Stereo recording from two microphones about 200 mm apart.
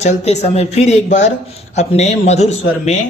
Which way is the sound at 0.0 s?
35° left (ahead or behind).